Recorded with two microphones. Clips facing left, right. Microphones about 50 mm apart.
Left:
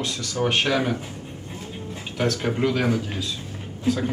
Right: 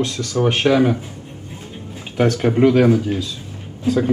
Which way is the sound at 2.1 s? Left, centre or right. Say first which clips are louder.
Right 7 dB; centre.